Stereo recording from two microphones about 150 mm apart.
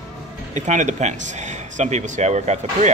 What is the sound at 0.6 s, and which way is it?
Speech, 55° right (ahead or behind).